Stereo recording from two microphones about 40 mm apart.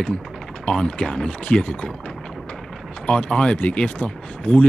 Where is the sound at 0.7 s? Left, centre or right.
Centre.